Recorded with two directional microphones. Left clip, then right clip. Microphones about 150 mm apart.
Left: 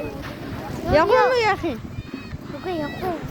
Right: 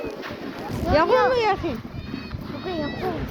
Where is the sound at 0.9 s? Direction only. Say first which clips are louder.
Left 2 dB; 45° left (ahead or behind).